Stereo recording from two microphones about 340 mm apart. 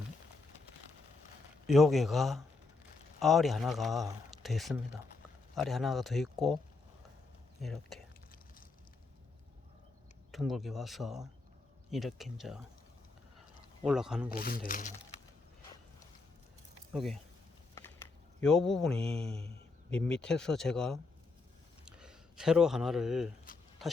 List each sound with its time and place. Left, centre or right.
1.6 s speech: centre
7.6 s speech: centre
10.3 s speech: centre
13.8 s speech: centre
14.4 s speech: left
16.9 s speech: centre
17.7 s a sound: centre
18.9 s speech: centre
19.9 s speech: centre
23.8 s a sound: centre